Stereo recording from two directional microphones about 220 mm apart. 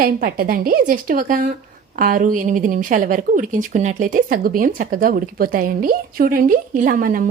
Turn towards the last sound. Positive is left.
turn(degrees=-40)  # may be behind; listen again after turning